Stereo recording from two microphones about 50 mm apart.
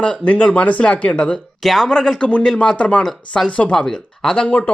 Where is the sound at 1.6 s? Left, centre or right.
Centre.